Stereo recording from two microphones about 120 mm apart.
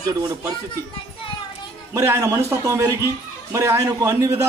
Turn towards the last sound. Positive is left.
turn(degrees=-20)  # may be behind; listen again after turning